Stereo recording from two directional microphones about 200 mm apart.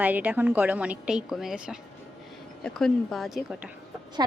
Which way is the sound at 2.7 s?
Centre (ahead or behind).